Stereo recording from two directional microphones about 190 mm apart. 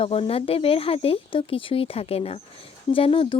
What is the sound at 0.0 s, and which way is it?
Speech, 30° left (ahead or behind).